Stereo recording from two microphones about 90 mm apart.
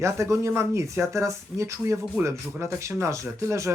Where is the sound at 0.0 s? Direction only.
35° right (ahead or behind).